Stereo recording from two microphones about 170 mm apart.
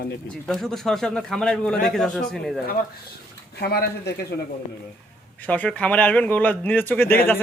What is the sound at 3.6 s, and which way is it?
Speech, 70° left (ahead or behind).